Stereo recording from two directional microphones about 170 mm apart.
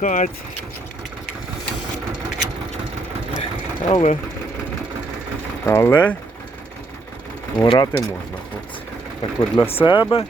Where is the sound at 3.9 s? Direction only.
45° left (ahead or behind).